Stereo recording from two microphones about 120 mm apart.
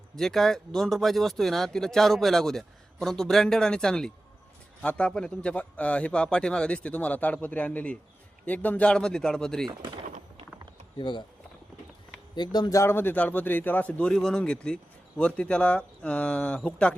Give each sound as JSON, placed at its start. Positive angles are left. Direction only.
{"t": 0.2, "sound": "speech", "side_deg": 5}
{"t": 9.6, "sound": "speech", "side_deg": -40}
{"t": 10.9, "sound": "speech", "side_deg": 40}
{"t": 12.3, "sound": "speech", "side_deg": 35}
{"t": 12.8, "sound": "speech", "side_deg": 20}